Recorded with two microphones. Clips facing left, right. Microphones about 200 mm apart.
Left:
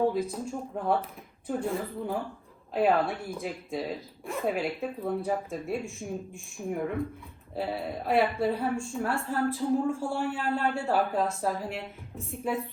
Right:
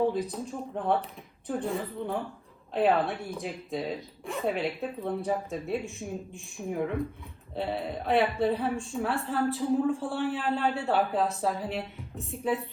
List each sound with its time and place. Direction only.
0.1 s speech: centre (ahead or behind)